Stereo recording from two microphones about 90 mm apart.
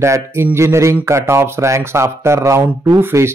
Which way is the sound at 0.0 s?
30° right (ahead or behind).